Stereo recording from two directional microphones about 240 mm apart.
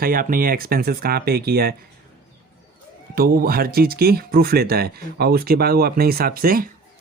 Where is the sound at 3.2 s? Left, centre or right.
Right.